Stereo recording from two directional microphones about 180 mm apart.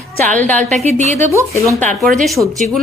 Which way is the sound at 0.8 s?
40° right (ahead or behind).